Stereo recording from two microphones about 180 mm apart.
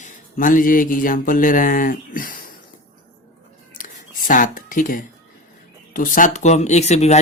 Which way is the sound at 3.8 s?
50° left (ahead or behind).